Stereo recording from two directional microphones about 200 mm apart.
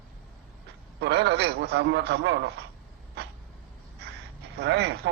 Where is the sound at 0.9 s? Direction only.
55° right (ahead or behind).